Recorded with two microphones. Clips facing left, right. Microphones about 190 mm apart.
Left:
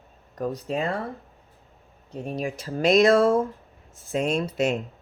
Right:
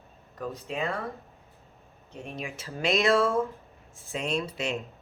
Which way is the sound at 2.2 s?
35° left (ahead or behind).